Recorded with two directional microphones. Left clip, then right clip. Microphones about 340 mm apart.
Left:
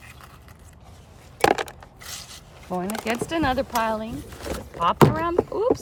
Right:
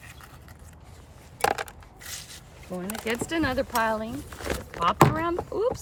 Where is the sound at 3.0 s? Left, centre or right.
Centre.